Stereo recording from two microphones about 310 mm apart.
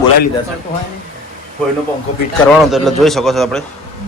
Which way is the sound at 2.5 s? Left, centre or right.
Centre.